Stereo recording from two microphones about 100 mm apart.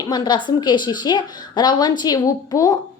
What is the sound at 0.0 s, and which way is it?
A woman's voice, 45° left (ahead or behind).